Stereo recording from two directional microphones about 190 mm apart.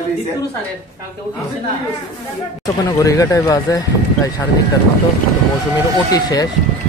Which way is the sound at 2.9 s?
15° left (ahead or behind).